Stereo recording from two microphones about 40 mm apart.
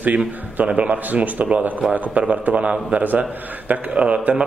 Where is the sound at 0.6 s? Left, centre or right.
Right.